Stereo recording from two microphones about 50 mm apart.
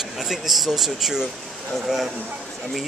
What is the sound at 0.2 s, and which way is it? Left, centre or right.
Speech, centre.